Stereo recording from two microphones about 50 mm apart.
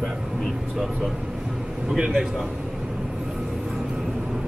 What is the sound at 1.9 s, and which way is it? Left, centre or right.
Speech, centre.